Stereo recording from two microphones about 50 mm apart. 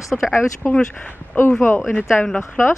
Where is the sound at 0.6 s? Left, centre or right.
Left.